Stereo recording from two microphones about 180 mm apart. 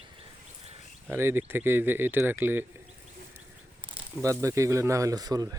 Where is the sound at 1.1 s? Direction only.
10° right (ahead or behind).